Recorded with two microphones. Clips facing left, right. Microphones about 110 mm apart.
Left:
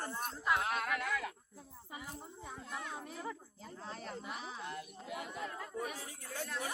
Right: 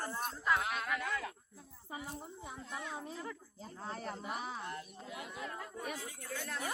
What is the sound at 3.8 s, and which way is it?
Speech, 45° right (ahead or behind).